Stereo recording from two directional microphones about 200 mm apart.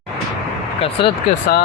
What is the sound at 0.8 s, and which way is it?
Speech, 30° left (ahead or behind).